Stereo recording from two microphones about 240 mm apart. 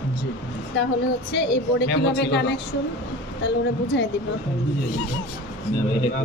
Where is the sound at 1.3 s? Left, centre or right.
Left.